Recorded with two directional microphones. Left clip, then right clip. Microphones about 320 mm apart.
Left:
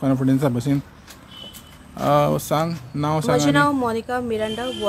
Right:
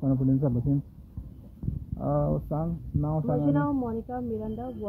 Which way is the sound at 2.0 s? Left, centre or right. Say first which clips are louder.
Left 11 dB; left.